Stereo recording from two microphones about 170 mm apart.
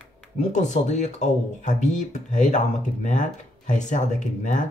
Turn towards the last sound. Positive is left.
turn(degrees=45)  # may be behind; listen again after turning